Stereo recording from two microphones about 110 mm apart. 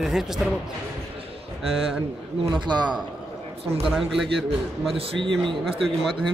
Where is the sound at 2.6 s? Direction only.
45° right (ahead or behind).